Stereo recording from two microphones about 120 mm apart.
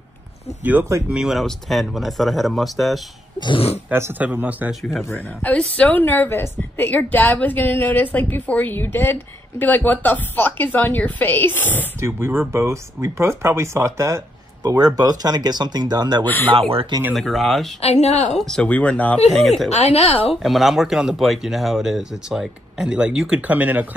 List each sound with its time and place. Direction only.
0.7 s speech: 20° right (ahead or behind)
1.0 s speech: 5° right (ahead or behind)
3.3 s speech: 45° left (ahead or behind)
3.9 s speech: 20° right (ahead or behind)
5.0 s a woman's voice: 15° left (ahead or behind)
12.0 s speech: 20° right (ahead or behind); by 16.3 s 35° right (ahead or behind)
16.3 s a woman's voice: 15° left (ahead or behind)
16.5 s speech: 50° right (ahead or behind)
17.1 s speech: centre (ahead or behind)
17.8 s speech: 65° left (ahead or behind)
18.4 s a woman's voice: 5° left (ahead or behind)
19.3 s speech: centre (ahead or behind)
19.8 s speech: 60° left (ahead or behind)
20.4 s speech: centre (ahead or behind)